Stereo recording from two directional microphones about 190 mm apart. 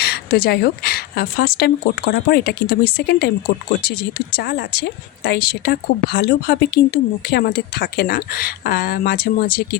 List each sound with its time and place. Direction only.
0.0 s speech: 55° left (ahead or behind)